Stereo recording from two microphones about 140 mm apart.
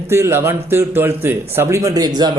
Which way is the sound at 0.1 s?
15° right (ahead or behind).